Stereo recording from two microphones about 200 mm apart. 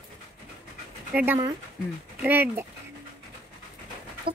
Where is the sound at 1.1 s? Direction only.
5° right (ahead or behind).